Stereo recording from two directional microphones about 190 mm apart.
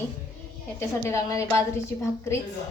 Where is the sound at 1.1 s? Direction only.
15° left (ahead or behind).